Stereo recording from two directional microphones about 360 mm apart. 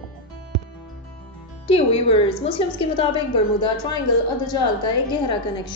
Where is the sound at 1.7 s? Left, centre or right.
Centre.